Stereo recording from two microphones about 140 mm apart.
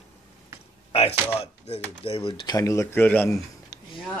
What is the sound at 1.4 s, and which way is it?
Speech, 45° left (ahead or behind).